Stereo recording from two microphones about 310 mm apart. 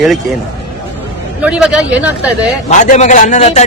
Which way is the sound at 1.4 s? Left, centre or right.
Centre.